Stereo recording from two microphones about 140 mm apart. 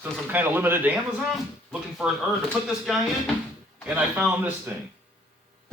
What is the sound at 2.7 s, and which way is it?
Speech, centre (ahead or behind).